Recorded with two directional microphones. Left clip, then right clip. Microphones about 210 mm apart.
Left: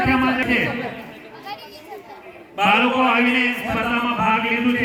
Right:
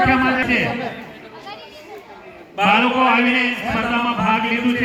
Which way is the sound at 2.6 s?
45° right (ahead or behind).